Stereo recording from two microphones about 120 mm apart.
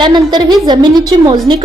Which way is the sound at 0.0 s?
40° right (ahead or behind).